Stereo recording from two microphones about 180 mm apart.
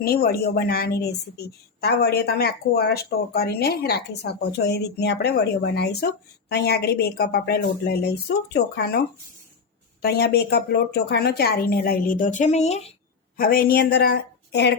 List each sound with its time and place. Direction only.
0.0 s speech: 55° left (ahead or behind)
10.0 s speech: 60° left (ahead or behind); by 12.9 s 35° left (ahead or behind)
13.3 s speech: 55° left (ahead or behind)